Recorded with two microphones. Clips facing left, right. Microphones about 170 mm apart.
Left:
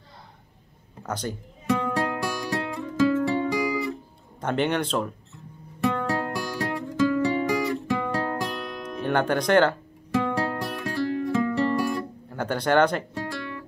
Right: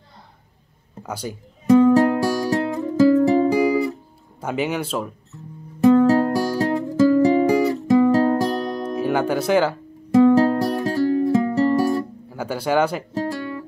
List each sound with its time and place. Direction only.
1.0 s a man's voice: 10° right (ahead or behind)
1.7 s music: 35° right (ahead or behind)
4.4 s speech: 5° right (ahead or behind)
5.9 s music: 35° right (ahead or behind)
8.9 s speech: 5° right (ahead or behind)
10.3 s music: 35° right (ahead or behind)
12.3 s speech: 5° right (ahead or behind)
13.1 s music: 35° right (ahead or behind)